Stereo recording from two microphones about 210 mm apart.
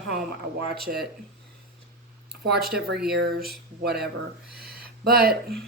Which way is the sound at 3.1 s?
50° right (ahead or behind).